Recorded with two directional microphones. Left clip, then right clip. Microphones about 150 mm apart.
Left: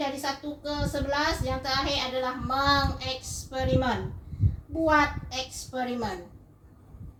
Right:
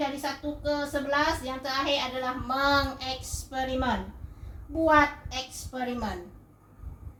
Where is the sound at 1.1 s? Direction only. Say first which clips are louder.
Right 1 dB; 10° right (ahead or behind).